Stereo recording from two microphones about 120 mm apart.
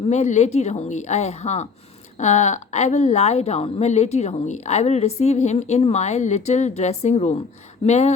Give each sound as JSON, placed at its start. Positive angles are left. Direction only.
{"t": 0.1, "sound": "a woman's voice", "side_deg": 70}
{"t": 2.1, "sound": "a woman's voice", "side_deg": 75}